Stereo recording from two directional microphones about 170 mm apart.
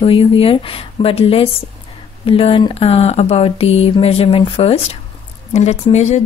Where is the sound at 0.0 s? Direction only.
35° left (ahead or behind).